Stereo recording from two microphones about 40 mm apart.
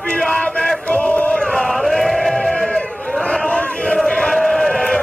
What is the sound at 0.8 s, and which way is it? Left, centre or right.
Battle cry, left.